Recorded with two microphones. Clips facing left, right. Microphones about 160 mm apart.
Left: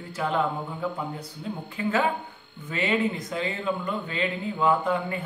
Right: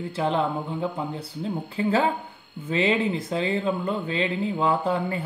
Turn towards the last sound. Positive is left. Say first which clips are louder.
# even
turn(degrees=-30)  # may be behind; listen again after turning